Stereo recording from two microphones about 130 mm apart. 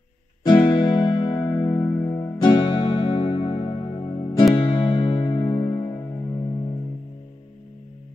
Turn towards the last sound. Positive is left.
turn(degrees=25)  # may be behind; listen again after turning